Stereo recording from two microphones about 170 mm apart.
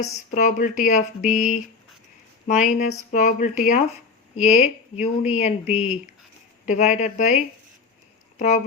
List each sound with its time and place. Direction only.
0.3 s speech: 45° left (ahead or behind)
8.4 s speech: 45° left (ahead or behind)